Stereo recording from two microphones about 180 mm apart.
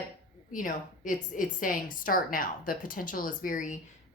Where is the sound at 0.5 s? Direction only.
45° left (ahead or behind).